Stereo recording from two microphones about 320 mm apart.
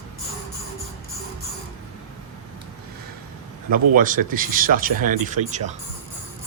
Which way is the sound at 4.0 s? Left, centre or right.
Right.